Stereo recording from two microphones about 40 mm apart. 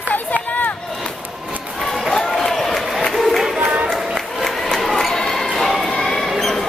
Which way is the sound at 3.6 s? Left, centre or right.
Right.